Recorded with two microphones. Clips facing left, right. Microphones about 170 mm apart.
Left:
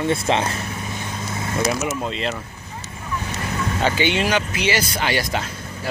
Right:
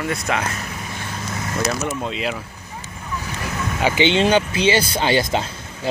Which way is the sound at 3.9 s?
25° right (ahead or behind).